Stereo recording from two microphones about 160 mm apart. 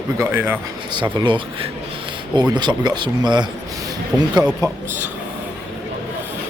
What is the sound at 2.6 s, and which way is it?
Speech, 25° right (ahead or behind).